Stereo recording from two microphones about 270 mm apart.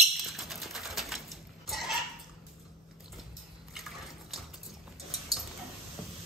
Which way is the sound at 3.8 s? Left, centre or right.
Centre.